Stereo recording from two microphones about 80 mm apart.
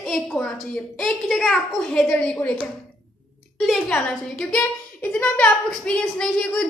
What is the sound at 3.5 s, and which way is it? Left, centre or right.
Speech, centre.